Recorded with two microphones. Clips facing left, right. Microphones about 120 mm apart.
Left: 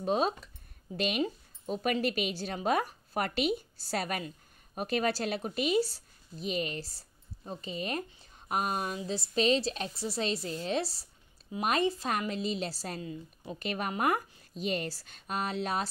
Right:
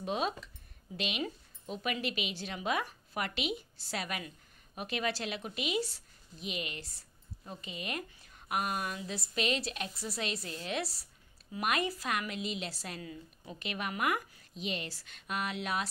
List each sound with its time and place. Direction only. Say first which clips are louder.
0.0 s a woman's voice: left 5 dB; 40° left (ahead or behind)
13.6 s speech: left 4 dB; 40° left (ahead or behind)